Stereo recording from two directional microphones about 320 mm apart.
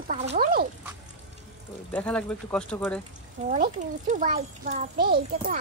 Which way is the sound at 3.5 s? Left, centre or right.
Right.